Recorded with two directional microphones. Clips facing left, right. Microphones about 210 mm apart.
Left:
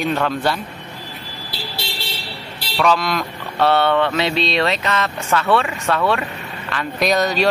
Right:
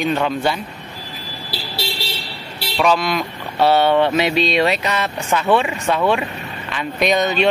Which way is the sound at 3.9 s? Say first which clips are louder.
Right 2 dB; 20° right (ahead or behind).